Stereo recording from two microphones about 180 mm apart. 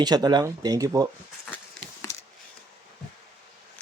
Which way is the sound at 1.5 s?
10° left (ahead or behind).